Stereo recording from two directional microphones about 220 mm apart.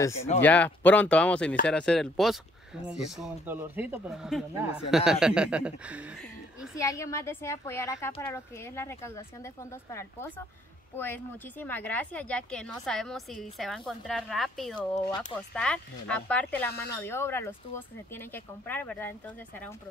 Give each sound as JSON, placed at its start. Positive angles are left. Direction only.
{"t": 0.4, "sound": "speech", "side_deg": 10}
{"t": 6.8, "sound": "speech", "side_deg": 15}
{"t": 14.8, "sound": "speech", "side_deg": 20}
{"t": 15.5, "sound": "speech", "side_deg": 5}